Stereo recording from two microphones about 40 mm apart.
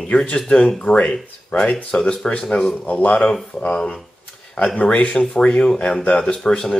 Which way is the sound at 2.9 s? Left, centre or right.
Left.